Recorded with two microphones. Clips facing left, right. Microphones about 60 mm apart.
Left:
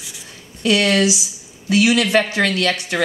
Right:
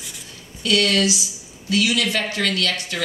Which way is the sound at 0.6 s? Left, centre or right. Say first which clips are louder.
Left 3 dB; left.